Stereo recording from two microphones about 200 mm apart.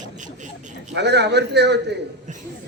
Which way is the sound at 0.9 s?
55° right (ahead or behind).